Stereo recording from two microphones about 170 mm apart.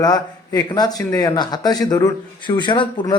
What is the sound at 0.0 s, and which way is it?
Speech, 20° left (ahead or behind).